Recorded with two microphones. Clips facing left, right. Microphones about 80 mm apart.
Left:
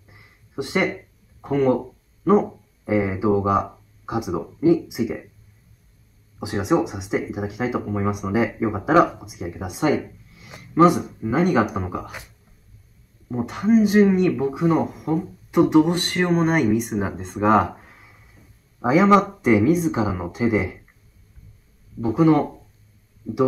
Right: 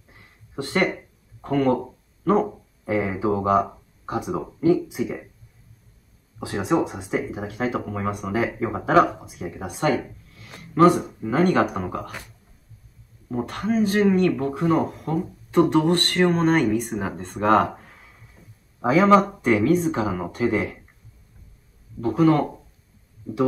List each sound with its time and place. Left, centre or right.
0.1 s a sound: centre
1.4 s speech: centre
6.4 s speech: centre
13.3 s speech: centre
17.4 s a sound: centre
18.9 s speech: centre
22.0 s speech: centre